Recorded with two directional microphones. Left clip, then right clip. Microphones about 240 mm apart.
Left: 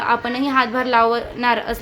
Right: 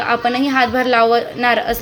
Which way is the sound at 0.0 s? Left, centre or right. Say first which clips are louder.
Right 3 dB; centre.